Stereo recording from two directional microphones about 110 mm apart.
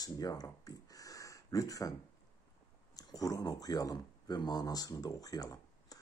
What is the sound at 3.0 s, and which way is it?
Speech, 35° left (ahead or behind).